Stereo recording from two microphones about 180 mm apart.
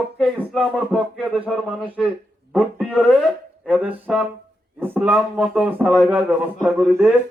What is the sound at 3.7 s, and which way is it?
Speech, 10° right (ahead or behind).